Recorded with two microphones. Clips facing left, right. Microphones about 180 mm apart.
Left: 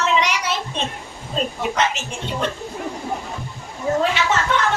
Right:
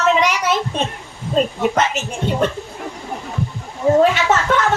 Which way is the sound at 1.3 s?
50° right (ahead or behind).